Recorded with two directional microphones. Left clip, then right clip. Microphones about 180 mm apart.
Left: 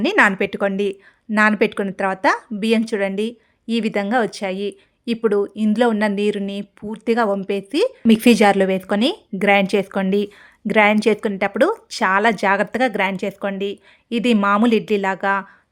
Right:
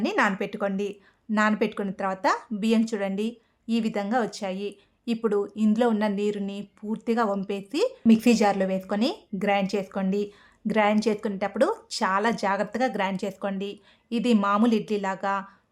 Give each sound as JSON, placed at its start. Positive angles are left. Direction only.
{"t": 0.0, "sound": "speech", "side_deg": 30}
{"t": 8.1, "sound": "speech", "side_deg": 35}